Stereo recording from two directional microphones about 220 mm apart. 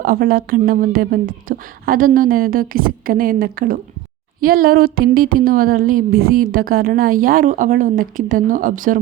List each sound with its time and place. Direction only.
0.0 s a woman's voice: 40° right (ahead or behind)